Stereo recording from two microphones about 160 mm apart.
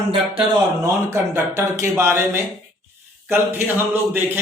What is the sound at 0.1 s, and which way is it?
Speech, 35° right (ahead or behind).